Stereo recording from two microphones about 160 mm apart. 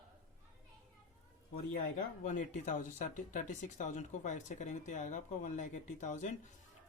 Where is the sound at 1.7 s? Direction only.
55° left (ahead or behind).